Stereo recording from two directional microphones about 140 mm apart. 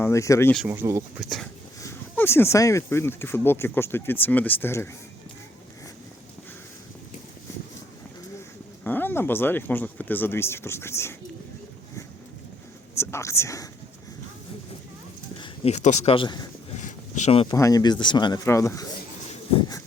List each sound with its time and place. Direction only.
0.0 s speech: 20° left (ahead or behind)
0.7 s speech: 20° right (ahead or behind)
1.2 s speech: centre (ahead or behind)
1.8 s speech: 20° left (ahead or behind)
8.8 s speech: 15° left (ahead or behind)
13.0 s speech: 20° left (ahead or behind)
15.4 s a sound: 50° left (ahead or behind)
16.1 s speech: 30° left (ahead or behind)
16.8 s a sound: 60° left (ahead or behind)
17.5 s speech: 25° left (ahead or behind)
18.4 s speech: 20° left (ahead or behind)